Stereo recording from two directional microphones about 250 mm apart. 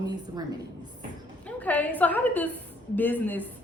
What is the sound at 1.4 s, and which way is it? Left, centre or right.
A woman's voice, centre.